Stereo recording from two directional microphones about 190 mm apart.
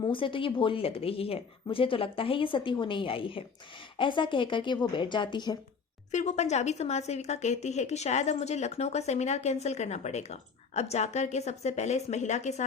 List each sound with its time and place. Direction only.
0.0 s speech: 25° left (ahead or behind)
6.1 s speech: 35° left (ahead or behind)